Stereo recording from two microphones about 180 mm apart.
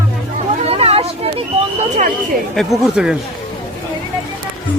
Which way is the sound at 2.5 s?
Centre (ahead or behind).